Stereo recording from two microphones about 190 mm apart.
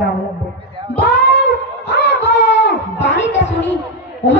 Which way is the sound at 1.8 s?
65° left (ahead or behind).